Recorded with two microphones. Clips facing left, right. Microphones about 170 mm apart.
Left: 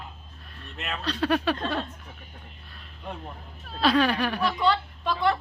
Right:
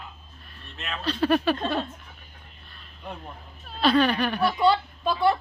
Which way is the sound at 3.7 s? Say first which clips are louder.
Right 1 dB; centre (ahead or behind).